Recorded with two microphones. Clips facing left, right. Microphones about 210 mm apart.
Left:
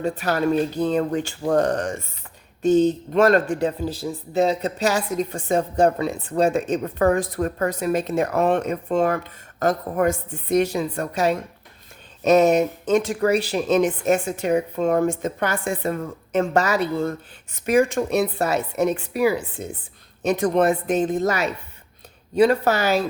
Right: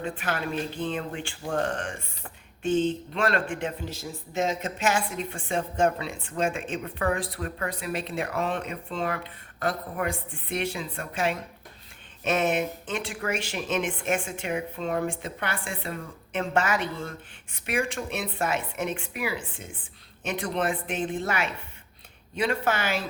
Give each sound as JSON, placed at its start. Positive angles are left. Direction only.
{"t": 0.2, "sound": "speech", "side_deg": 40}